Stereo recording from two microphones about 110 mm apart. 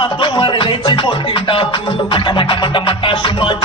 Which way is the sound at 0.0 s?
45° left (ahead or behind).